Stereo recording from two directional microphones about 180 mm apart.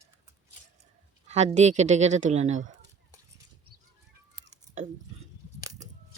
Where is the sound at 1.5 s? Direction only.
40° right (ahead or behind).